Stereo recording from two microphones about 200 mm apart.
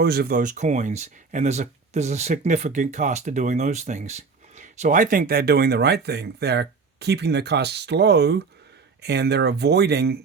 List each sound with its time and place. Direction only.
0.0 s speech: 50° right (ahead or behind)